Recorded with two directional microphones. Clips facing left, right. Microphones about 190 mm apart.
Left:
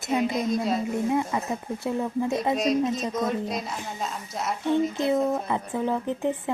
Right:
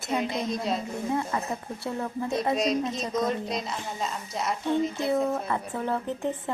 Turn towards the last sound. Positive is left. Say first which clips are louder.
# left 3 dB
turn(degrees=15)  # may be behind; listen again after turning